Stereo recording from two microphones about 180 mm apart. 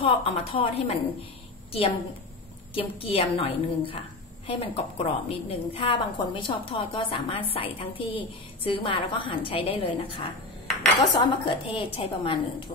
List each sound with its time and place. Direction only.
0.0 s a woman's voice: 30° left (ahead or behind)